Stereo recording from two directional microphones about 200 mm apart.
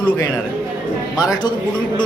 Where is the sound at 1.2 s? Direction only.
20° left (ahead or behind).